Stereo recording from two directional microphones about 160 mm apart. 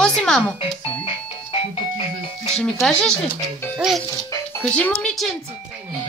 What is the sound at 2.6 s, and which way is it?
Speech, 5° left (ahead or behind).